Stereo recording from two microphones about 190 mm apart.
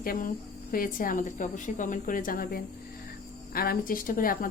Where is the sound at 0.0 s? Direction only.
50° left (ahead or behind).